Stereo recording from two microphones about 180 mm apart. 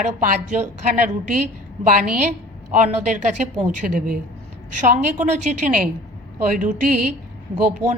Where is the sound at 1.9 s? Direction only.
50° right (ahead or behind).